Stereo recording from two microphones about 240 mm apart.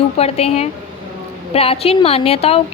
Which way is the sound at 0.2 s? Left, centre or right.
Left.